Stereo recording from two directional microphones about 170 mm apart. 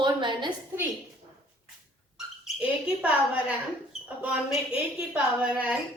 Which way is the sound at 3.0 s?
5° right (ahead or behind).